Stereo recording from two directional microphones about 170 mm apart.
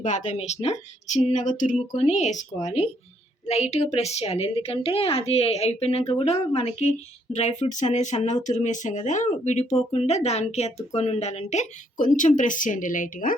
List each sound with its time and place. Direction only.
0.0 s a woman's voice: 45° left (ahead or behind)